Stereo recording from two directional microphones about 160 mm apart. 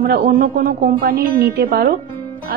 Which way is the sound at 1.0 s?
80° right.